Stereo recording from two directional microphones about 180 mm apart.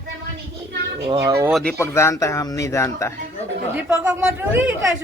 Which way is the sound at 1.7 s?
15° left (ahead or behind).